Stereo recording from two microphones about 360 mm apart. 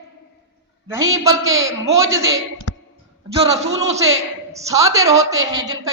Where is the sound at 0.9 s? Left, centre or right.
Centre.